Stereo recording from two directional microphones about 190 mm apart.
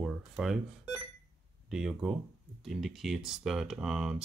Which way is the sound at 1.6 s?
5° right (ahead or behind).